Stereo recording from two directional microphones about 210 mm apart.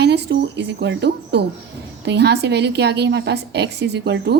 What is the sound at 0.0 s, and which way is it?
A woman's voice, 55° right (ahead or behind).